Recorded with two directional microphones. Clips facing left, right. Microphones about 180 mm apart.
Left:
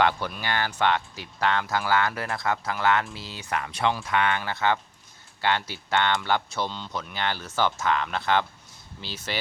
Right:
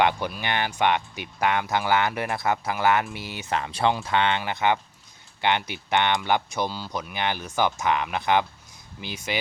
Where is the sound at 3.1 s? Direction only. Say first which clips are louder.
Right 4 dB; 30° left (ahead or behind).